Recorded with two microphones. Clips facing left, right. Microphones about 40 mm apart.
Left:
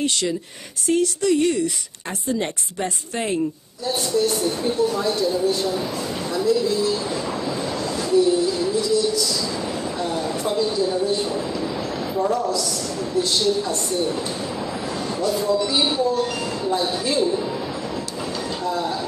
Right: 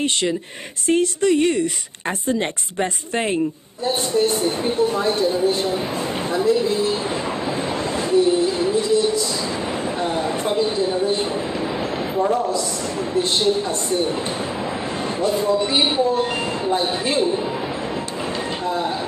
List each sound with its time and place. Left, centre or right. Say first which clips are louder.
0.8 s speech: right 2 dB; right
2.8 s speech: right 4 dB; right
8.1 s music: right 1 dB; right
10.4 s speech: even; right
12.2 s speech: right 2 dB; right
15.2 s speech: right 2 dB; right